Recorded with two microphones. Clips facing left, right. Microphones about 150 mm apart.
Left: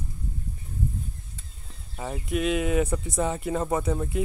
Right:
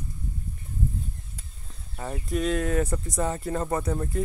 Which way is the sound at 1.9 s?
5° left (ahead or behind).